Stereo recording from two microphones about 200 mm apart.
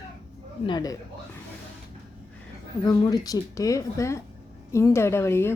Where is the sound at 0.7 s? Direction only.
20° left (ahead or behind).